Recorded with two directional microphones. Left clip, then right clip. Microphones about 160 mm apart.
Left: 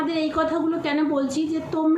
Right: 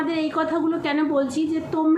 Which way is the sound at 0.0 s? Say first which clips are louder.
Even; 5° left (ahead or behind).